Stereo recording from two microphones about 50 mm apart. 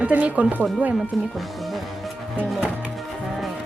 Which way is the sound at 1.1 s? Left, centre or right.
Centre.